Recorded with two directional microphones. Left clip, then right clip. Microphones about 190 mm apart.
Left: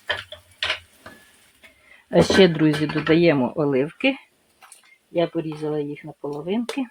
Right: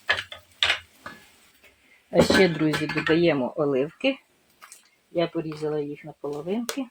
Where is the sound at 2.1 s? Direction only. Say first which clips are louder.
Left 3 dB; 35° left (ahead or behind).